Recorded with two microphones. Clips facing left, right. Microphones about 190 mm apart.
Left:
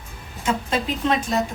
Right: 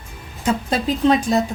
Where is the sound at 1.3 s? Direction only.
35° right (ahead or behind).